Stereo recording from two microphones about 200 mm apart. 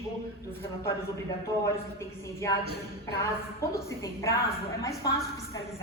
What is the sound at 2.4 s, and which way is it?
Speech, 15° left (ahead or behind).